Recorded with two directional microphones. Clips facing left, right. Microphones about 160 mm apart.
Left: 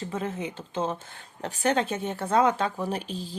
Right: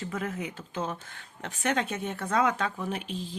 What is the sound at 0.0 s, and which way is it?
Speech, 30° left (ahead or behind).